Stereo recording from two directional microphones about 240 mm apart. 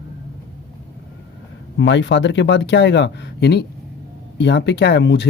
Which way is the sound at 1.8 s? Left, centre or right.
Left.